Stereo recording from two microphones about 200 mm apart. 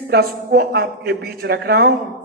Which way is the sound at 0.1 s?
55° right (ahead or behind).